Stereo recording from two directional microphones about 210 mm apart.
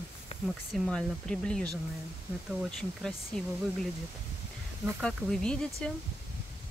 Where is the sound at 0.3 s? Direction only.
30° left (ahead or behind).